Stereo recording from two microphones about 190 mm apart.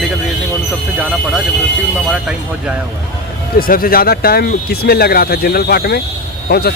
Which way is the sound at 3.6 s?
50° left (ahead or behind).